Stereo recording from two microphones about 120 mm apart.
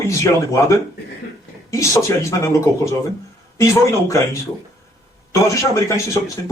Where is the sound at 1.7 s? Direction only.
25° left (ahead or behind).